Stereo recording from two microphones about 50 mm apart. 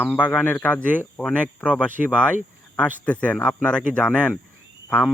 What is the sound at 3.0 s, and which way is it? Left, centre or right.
Speech, left.